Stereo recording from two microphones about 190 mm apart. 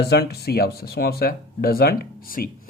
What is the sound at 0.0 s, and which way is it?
Speech, 60° left (ahead or behind).